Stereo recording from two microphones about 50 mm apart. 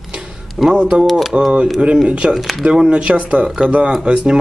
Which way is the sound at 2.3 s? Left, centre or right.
Centre.